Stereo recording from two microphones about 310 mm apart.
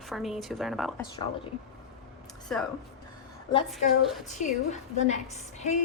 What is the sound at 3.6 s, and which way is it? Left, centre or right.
Speech, centre.